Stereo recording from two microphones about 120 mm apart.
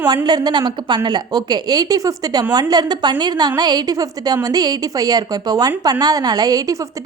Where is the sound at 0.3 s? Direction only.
35° right (ahead or behind).